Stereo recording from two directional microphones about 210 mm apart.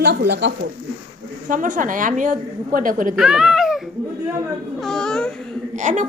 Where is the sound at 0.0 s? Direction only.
50° right (ahead or behind).